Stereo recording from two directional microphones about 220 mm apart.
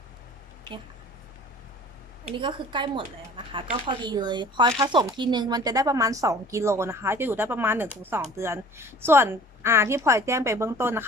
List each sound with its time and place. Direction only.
2.2 s a woman's voice: 20° right (ahead or behind)